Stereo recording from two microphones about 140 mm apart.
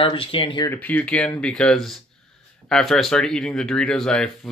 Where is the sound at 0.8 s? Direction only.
10° left (ahead or behind).